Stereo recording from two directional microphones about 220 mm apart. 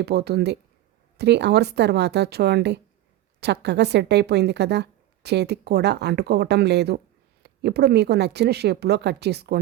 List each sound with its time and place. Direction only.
0.0 s speech: 45° right (ahead or behind)